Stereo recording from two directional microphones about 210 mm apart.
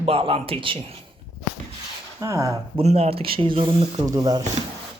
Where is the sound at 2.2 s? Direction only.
15° right (ahead or behind).